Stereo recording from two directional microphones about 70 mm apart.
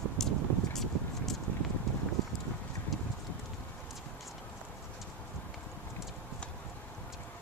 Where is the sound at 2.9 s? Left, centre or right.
Centre.